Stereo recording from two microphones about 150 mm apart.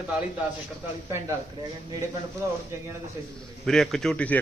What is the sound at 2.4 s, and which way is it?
Speech, 20° right (ahead or behind).